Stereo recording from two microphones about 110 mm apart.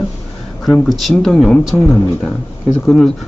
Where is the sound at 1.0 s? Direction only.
Centre (ahead or behind).